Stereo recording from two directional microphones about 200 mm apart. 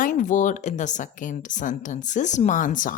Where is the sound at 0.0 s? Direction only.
40° left (ahead or behind).